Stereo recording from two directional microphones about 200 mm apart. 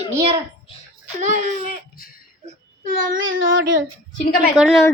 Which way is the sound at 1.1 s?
35° right (ahead or behind).